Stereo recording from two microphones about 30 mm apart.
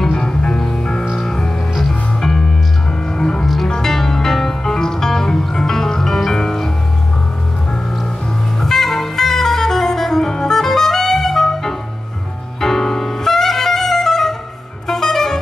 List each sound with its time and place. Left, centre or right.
0.1 s music: left
3.8 s music: centre
8.5 s music: centre